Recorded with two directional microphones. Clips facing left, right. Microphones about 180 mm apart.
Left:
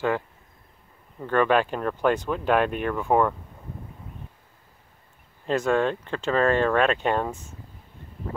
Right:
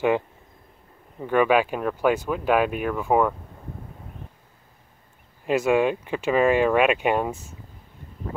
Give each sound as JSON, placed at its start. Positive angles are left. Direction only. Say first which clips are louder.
{"t": 1.2, "sound": "speech", "louder": "right 2 dB", "side_deg": -10}
{"t": 5.4, "sound": "speech", "louder": "right 2 dB", "side_deg": -10}